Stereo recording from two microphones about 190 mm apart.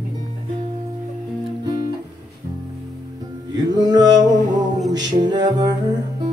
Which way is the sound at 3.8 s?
20° right (ahead or behind).